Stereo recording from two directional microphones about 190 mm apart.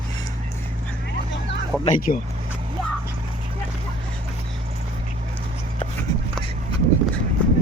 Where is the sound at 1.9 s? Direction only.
45° left (ahead or behind).